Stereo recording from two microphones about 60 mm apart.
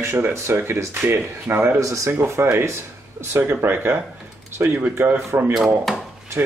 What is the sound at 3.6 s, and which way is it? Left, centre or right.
Speech, right.